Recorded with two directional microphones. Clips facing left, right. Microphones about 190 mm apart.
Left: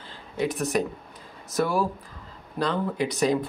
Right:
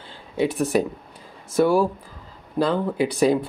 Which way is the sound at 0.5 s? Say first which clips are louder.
Right 3 dB; 30° right (ahead or behind).